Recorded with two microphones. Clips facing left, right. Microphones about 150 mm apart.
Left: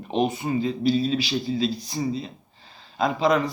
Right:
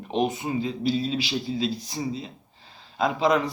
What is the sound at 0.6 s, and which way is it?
Speech, 10° right (ahead or behind).